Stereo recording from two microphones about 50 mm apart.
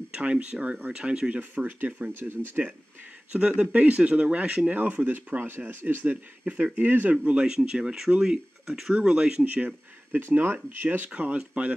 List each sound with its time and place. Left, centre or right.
0.1 s speech: right
1.5 s speech: right
2.1 s speech: right
3.3 s speech: right
6.0 s speech: right
7.2 s speech: centre
9.4 s speech: right
10.1 s speech: right
11.1 s speech: right